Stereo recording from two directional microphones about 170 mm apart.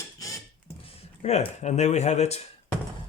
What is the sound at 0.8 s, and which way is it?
Speech, 35° left (ahead or behind).